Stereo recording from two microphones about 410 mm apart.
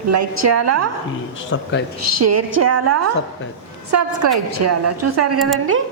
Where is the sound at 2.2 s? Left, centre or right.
Right.